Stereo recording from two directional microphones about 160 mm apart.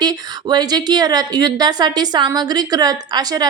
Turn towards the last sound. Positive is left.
turn(degrees=-25)  # may be behind; listen again after turning